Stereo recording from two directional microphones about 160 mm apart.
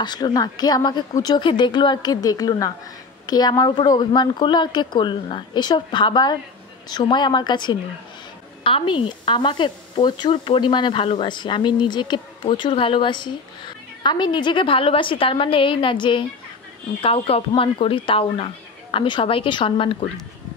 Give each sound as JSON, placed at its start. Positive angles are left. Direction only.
{"t": 0.0, "sound": "speech", "side_deg": 25}